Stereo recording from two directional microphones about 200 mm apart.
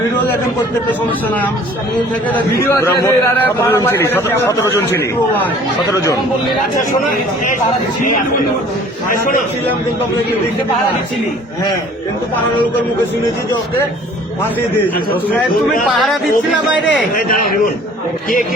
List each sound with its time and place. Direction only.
2.6 s a man's voice: 15° left (ahead or behind)
5.9 s a man's voice: 15° left (ahead or behind)
15.9 s speech: centre (ahead or behind)
17.2 s a man's voice: 45° left (ahead or behind)